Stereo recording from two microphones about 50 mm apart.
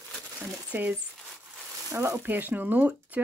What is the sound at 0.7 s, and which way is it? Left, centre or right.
Speech, right.